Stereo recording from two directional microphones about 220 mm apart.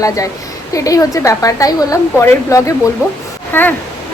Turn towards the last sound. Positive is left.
turn(degrees=10)  # may be behind; listen again after turning